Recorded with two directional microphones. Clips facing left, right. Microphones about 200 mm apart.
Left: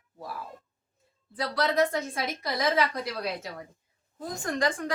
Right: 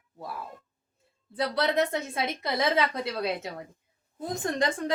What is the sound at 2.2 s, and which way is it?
A woman's voice, 25° right (ahead or behind).